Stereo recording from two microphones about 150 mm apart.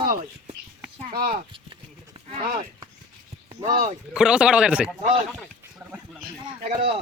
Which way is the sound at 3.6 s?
60° right (ahead or behind).